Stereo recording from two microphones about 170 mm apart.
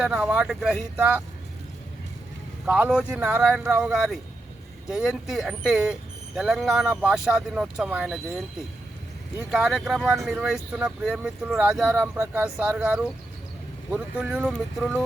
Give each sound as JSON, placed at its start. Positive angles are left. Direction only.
{"t": 0.0, "sound": "speech", "side_deg": -5}
{"t": 2.6, "sound": "speech", "side_deg": -10}
{"t": 9.5, "sound": "speech", "side_deg": -5}